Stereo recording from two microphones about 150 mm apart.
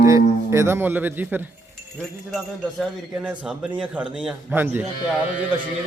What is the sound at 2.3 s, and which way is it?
Jingle bell, centre (ahead or behind).